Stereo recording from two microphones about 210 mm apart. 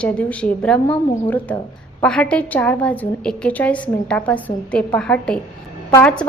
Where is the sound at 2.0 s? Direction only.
5° left (ahead or behind).